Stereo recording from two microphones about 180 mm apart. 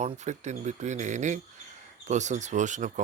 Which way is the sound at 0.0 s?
40° right (ahead or behind).